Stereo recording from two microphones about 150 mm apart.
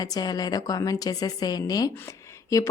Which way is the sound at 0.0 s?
25° left (ahead or behind).